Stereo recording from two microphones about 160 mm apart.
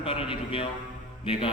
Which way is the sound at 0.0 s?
35° left (ahead or behind).